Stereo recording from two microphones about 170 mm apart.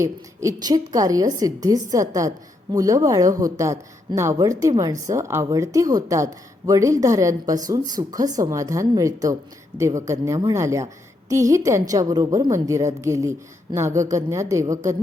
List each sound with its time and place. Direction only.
0.0 s a woman's voice: 20° right (ahead or behind)